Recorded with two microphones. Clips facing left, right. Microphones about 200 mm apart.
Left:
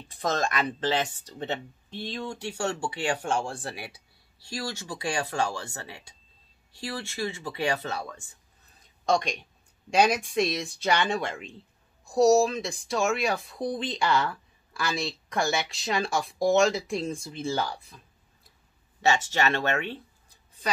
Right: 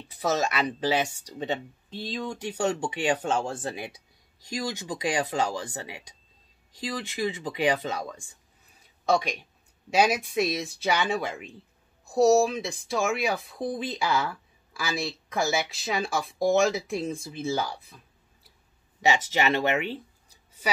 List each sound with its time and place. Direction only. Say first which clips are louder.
0.1 s speech: right 1 dB; 5° right (ahead or behind)
18.9 s speech: even; 15° right (ahead or behind)